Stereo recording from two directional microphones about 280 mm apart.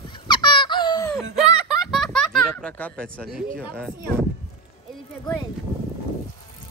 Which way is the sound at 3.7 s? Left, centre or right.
Centre.